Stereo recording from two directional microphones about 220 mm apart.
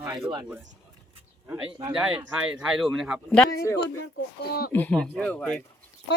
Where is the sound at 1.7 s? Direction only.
20° right (ahead or behind).